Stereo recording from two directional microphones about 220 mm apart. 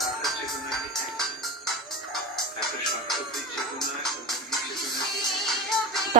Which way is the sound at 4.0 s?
Centre (ahead or behind).